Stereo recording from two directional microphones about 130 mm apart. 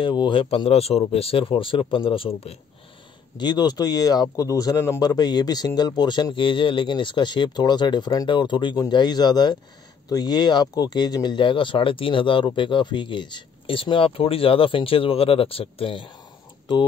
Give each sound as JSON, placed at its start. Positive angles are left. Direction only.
{"t": 0.0, "sound": "speech", "side_deg": 40}
{"t": 3.3, "sound": "speech", "side_deg": 35}